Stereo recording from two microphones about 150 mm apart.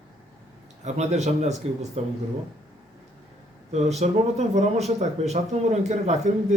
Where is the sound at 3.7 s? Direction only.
45° right (ahead or behind).